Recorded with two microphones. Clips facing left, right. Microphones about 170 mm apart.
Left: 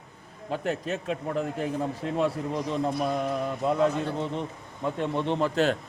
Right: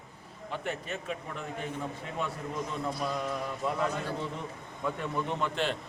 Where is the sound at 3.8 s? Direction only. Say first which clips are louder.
Left 7 dB; 25° left (ahead or behind).